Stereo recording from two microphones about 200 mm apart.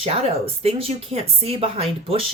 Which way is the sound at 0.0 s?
30° right (ahead or behind).